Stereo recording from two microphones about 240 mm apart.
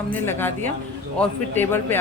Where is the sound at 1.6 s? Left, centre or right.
Centre.